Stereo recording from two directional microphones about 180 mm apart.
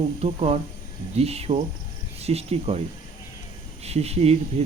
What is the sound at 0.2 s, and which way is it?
Speech, 35° right (ahead or behind).